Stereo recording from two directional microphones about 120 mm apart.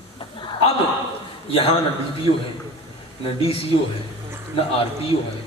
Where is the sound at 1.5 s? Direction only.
55° left (ahead or behind).